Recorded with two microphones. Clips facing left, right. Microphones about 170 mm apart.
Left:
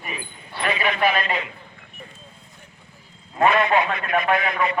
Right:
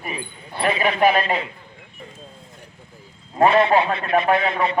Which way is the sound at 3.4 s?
30° right (ahead or behind).